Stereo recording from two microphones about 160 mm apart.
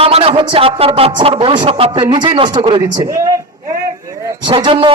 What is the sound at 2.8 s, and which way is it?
Speech, 25° right (ahead or behind).